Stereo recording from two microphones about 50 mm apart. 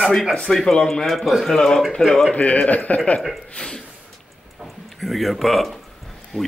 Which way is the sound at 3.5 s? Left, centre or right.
Centre.